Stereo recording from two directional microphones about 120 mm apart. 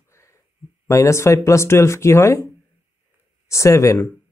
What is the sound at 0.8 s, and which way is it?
Speech, 25° left (ahead or behind).